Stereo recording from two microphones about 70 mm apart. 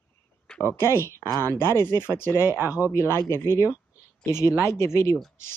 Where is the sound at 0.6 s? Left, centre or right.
Left.